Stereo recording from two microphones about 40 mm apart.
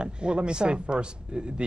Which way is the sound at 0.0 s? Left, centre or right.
Right.